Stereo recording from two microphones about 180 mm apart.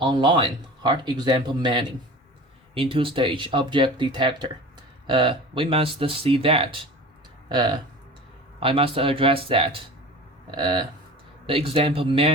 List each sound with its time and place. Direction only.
0.0 s speech: 25° right (ahead or behind)